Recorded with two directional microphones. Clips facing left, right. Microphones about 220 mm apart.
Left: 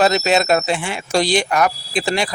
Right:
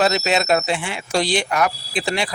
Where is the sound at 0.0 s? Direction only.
45° left (ahead or behind).